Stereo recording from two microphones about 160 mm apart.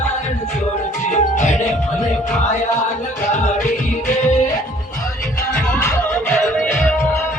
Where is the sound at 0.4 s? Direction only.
50° left (ahead or behind).